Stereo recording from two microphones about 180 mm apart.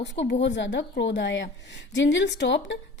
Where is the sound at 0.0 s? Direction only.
80° left.